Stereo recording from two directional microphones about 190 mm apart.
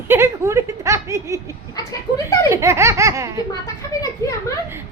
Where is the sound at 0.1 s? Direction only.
15° right (ahead or behind).